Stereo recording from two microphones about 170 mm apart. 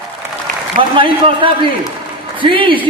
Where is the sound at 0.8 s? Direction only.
30° right (ahead or behind).